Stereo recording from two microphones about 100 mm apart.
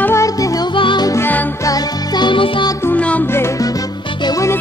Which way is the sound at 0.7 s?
55° left (ahead or behind).